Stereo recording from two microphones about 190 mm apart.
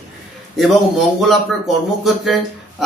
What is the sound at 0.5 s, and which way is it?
A man's voice, centre (ahead or behind).